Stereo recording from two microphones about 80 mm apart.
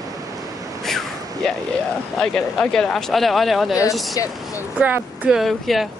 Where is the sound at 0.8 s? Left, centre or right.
Centre.